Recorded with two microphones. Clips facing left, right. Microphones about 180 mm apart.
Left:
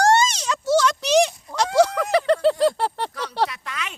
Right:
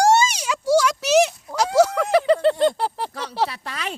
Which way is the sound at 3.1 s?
30° right (ahead or behind).